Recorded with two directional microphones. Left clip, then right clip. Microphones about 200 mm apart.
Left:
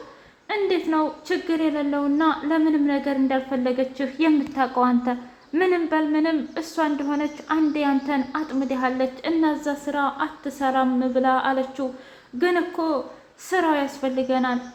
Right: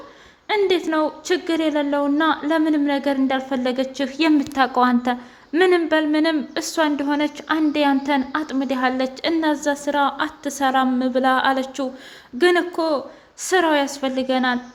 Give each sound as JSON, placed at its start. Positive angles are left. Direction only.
{"t": 0.4, "sound": "a woman's voice", "side_deg": -40}